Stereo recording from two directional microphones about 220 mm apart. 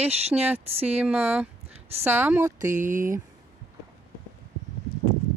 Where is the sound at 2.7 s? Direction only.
35° right (ahead or behind).